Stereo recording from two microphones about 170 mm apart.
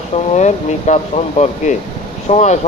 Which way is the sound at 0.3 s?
45° left (ahead or behind).